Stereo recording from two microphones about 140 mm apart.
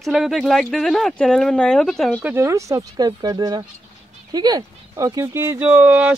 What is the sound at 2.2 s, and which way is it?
Speech, 20° right (ahead or behind).